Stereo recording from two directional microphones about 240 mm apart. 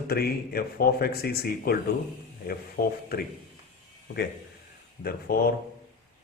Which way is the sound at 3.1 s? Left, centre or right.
Left.